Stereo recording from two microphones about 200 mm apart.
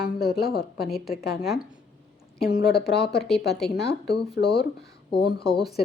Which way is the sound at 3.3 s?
55° left (ahead or behind).